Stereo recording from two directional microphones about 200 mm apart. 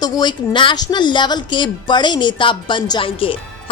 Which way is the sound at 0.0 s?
20° left (ahead or behind).